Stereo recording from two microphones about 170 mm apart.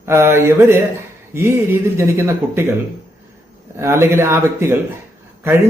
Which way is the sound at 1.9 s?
15° right (ahead or behind).